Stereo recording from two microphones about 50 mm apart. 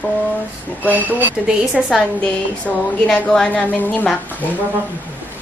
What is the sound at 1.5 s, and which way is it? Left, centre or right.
Speech, right.